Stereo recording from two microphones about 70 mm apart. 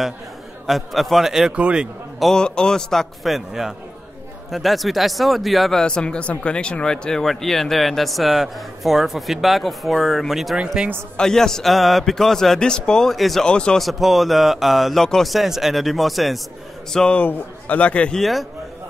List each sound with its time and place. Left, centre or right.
0.7 s speech: centre
1.5 s a man's voice: centre
2.3 s a man's voice: centre
11.1 s a man's voice: centre
13.5 s a man's voice: centre
13.7 s speech: centre
16.9 s a man's voice: centre
18.2 s speech: centre